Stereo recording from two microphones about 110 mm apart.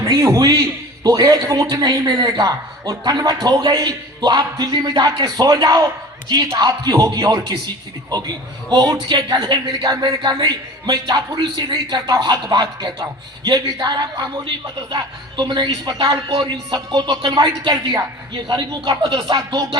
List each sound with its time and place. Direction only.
0.0 s a man's voice: 30° right (ahead or behind)